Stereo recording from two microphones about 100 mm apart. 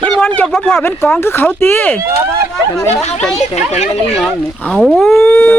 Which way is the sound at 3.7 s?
90° left.